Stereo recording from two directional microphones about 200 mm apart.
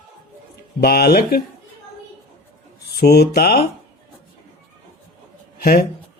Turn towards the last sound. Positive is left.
turn(degrees=50)  # may be behind; listen again after turning